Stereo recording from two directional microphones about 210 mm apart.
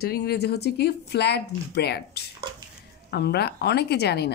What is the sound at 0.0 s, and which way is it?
Speech, 50° left (ahead or behind).